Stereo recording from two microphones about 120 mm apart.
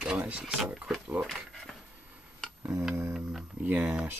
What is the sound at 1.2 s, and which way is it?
Speech, centre (ahead or behind).